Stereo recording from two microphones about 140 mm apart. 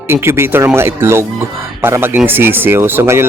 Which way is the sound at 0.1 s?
20° right (ahead or behind).